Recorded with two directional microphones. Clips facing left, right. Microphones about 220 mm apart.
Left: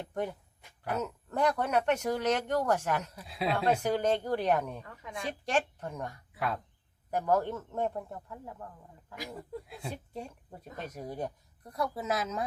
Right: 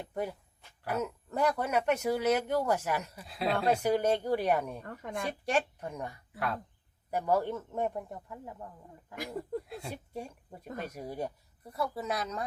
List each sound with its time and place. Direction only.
0.0 s speech: 5° right (ahead or behind)
4.9 s a woman's voice: 55° right (ahead or behind)
5.5 s speech: 10° right (ahead or behind)
6.3 s speech: centre (ahead or behind); by 8.5 s 15° right (ahead or behind)
9.6 s speech: centre (ahead or behind)
9.9 s speech: 10° right (ahead or behind)